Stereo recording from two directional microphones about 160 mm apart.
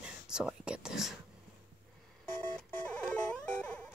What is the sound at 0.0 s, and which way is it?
Speech, 5° right (ahead or behind).